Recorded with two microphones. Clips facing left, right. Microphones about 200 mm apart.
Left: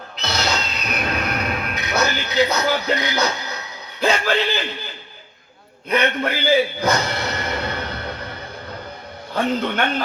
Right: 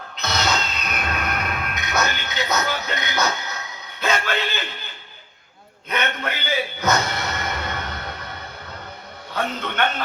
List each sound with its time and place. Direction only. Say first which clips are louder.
0.2 s music: even; 30° left (ahead or behind)
4.0 s speech: left 4 dB; 35° left (ahead or behind)
5.9 s a man's voice: left 6 dB; 35° left (ahead or behind)
9.3 s a man's voice: left 6 dB; 30° left (ahead or behind)